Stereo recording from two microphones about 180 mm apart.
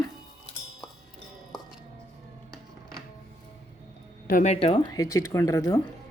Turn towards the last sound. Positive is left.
turn(degrees=20)  # may be behind; listen again after turning